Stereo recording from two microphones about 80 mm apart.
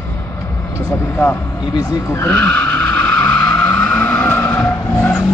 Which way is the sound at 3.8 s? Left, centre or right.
Left.